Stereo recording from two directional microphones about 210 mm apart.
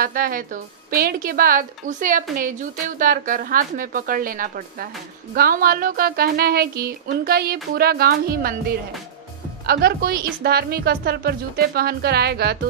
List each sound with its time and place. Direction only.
0.0 s speech: 40° right (ahead or behind)